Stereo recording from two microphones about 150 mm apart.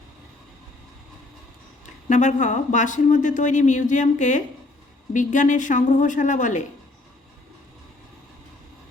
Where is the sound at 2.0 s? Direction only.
55° left (ahead or behind).